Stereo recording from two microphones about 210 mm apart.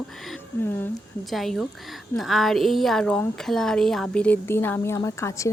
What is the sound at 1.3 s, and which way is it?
Speech, centre (ahead or behind).